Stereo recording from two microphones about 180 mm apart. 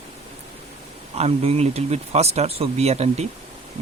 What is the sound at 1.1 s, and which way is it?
Speech, 35° right (ahead or behind).